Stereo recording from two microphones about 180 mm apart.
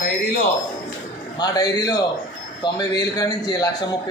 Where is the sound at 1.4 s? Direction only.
20° left (ahead or behind).